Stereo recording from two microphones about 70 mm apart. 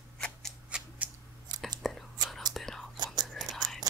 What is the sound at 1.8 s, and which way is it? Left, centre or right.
Whispering, centre.